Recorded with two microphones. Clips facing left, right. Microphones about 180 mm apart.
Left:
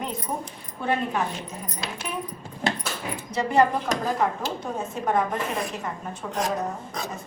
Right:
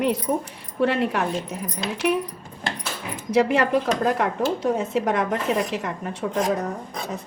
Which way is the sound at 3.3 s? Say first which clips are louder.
Right 3 dB; 75° right (ahead or behind).